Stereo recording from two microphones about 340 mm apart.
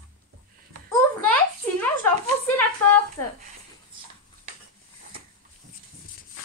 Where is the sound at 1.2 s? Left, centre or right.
Centre.